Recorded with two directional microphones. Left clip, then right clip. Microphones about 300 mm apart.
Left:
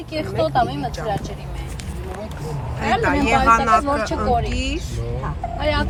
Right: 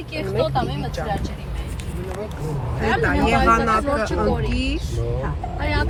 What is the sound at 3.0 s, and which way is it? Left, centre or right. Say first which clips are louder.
Speech: left 1 dB; centre.